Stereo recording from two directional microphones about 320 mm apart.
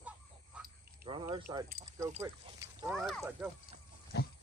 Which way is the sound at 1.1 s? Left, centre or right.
Centre.